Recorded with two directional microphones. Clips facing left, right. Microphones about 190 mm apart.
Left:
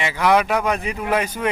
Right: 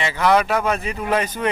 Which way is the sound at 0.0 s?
10° left (ahead or behind).